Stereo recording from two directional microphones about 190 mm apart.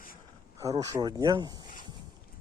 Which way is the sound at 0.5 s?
20° right (ahead or behind).